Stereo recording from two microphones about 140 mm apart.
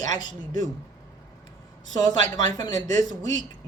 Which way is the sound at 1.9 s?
25° left (ahead or behind).